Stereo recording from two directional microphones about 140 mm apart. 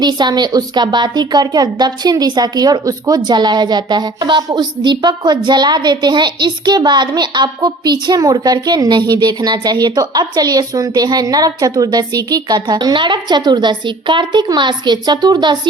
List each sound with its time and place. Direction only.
0.0 s a woman's voice: 30° right (ahead or behind)